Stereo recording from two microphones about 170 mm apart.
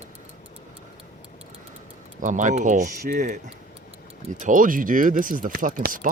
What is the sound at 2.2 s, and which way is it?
Speech, 45° right (ahead or behind).